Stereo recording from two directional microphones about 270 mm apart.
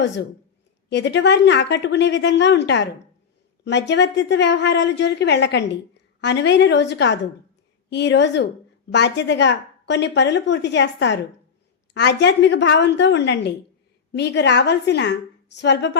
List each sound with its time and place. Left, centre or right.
0.9 s a woman's voice: left